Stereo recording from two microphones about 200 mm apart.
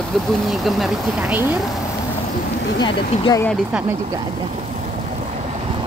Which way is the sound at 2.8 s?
20° left (ahead or behind).